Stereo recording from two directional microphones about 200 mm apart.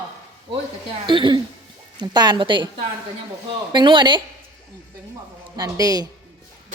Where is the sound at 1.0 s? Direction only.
25° right (ahead or behind).